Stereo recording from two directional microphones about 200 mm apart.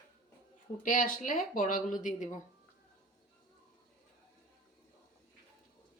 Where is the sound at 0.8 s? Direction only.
40° left (ahead or behind).